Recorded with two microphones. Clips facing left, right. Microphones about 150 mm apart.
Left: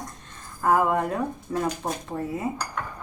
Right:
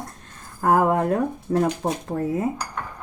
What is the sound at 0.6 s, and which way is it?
A woman's voice, 50° right (ahead or behind).